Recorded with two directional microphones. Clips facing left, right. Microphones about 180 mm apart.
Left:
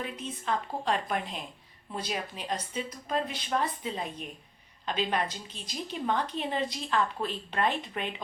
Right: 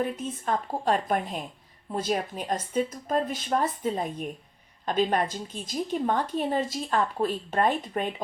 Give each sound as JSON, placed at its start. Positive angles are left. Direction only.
{"t": 0.0, "sound": "speech", "side_deg": -45}